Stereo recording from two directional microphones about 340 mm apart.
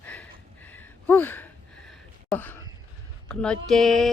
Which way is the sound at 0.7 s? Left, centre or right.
Centre.